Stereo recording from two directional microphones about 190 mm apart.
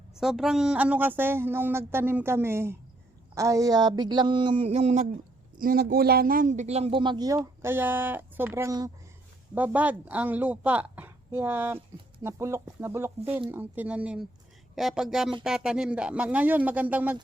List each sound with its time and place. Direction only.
0.2 s a man's voice: centre (ahead or behind); by 5.0 s 35° right (ahead or behind)
5.5 s a man's voice: 50° right (ahead or behind); by 17.2 s 10° right (ahead or behind)